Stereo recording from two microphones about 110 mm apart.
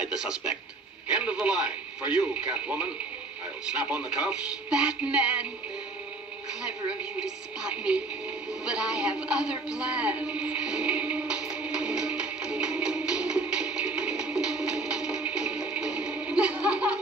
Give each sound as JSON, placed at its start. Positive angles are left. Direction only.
{"t": 0.0, "sound": "a man's voice", "side_deg": -5}
{"t": 6.9, "sound": "speech", "side_deg": -10}
{"t": 8.6, "sound": "a sound", "side_deg": -5}